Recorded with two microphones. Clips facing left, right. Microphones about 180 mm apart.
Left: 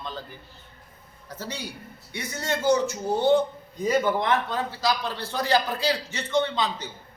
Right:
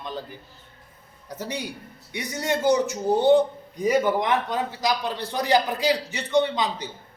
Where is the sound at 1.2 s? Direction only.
15° right (ahead or behind).